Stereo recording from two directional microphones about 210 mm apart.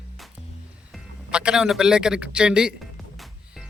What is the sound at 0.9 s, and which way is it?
Speech, 5° right (ahead or behind).